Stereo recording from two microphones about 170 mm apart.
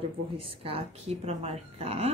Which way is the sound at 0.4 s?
30° right (ahead or behind).